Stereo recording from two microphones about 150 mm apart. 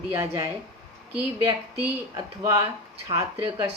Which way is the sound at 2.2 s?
25° right (ahead or behind).